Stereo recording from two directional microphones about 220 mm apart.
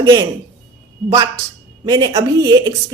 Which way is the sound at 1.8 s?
15° right (ahead or behind).